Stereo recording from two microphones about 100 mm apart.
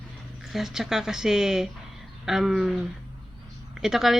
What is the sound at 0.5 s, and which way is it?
Speech, 5° right (ahead or behind).